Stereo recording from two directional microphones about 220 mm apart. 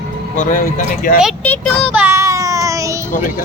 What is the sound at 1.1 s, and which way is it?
Speech, centre (ahead or behind).